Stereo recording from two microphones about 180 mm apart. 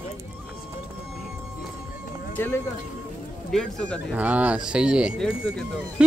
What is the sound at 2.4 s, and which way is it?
Speech, 10° left (ahead or behind).